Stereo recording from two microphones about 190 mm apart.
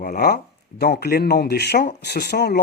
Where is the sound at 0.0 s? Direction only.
50° left (ahead or behind).